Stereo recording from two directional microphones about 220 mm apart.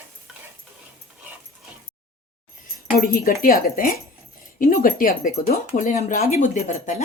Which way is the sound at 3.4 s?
40° left (ahead or behind).